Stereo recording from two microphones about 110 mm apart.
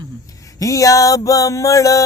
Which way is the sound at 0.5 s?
30° left (ahead or behind).